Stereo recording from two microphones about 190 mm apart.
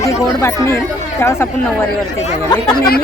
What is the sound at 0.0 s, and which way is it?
Speech, 15° left (ahead or behind).